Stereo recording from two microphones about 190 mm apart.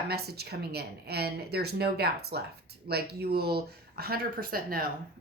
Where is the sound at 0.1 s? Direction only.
55° right (ahead or behind).